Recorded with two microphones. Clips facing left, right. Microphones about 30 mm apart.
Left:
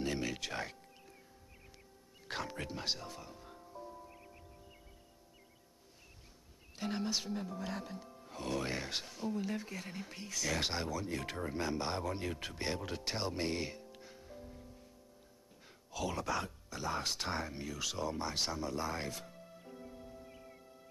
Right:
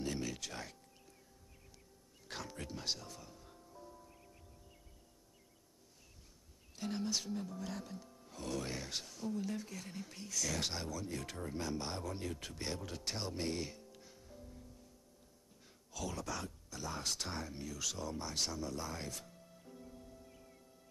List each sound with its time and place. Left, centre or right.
0.0 s music: left
2.2 s music: left
6.8 s speech: left
15.9 s speech: left